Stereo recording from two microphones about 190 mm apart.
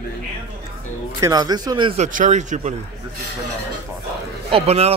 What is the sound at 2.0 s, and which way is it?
Speech, 40° right (ahead or behind).